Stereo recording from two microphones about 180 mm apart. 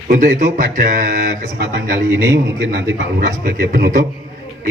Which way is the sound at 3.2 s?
55° right (ahead or behind).